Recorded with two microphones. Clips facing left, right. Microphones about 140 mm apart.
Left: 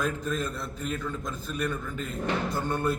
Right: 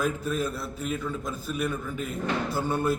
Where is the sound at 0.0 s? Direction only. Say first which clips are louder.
Right 2 dB; 5° right (ahead or behind).